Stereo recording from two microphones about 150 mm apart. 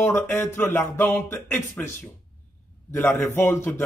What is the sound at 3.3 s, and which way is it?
Speech, 15° left (ahead or behind).